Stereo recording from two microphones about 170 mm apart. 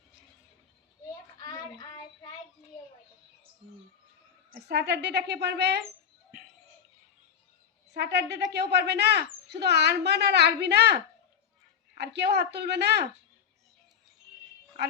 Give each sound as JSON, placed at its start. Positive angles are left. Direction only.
{"t": 1.4, "sound": "child singing", "side_deg": 25}
{"t": 4.6, "sound": "speech", "side_deg": -75}
{"t": 7.9, "sound": "speech", "side_deg": -75}